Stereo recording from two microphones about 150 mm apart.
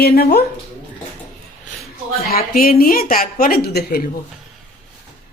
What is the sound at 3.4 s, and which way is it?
Speech, 85° left.